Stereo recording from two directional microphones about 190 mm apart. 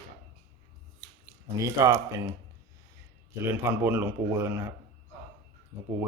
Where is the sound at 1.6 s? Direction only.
15° right (ahead or behind).